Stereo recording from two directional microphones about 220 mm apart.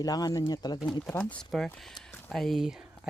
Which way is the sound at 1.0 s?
5° left (ahead or behind).